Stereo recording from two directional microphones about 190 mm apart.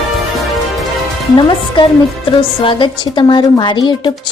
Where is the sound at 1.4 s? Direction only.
25° left (ahead or behind).